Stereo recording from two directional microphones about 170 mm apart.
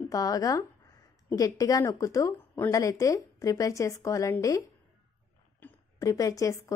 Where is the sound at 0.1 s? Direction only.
20° left (ahead or behind).